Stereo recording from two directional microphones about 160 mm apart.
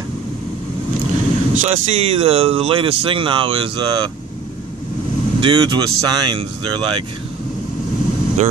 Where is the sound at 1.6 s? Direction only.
40° right (ahead or behind).